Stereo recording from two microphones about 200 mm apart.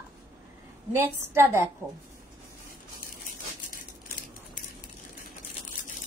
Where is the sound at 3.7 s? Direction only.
40° left (ahead or behind).